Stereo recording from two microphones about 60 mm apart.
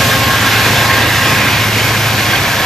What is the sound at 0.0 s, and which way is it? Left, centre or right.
Vehicle, centre.